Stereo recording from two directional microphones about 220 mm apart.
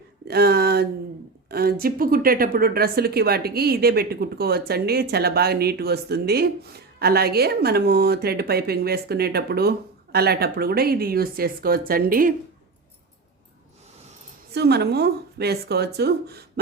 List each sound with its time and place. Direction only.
0.3 s a sound: 45° right (ahead or behind)
1.5 s a woman's voice: 45° right (ahead or behind)
14.5 s a woman's voice: 50° right (ahead or behind)